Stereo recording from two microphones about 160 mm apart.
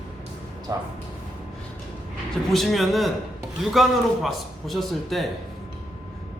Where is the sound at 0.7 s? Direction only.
20° right (ahead or behind).